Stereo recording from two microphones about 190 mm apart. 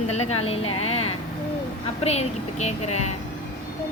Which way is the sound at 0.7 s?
90° left.